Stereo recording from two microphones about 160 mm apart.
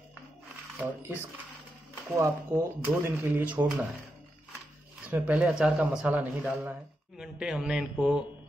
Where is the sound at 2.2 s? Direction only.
15° right (ahead or behind).